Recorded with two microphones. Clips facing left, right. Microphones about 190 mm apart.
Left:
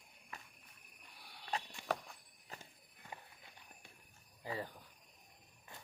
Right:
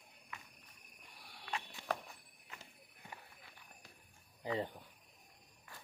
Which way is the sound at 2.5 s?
35° left (ahead or behind).